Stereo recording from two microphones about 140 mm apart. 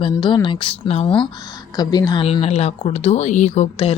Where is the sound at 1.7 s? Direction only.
30° left (ahead or behind).